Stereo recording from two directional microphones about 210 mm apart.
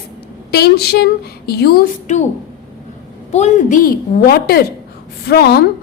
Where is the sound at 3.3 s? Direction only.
35° left (ahead or behind).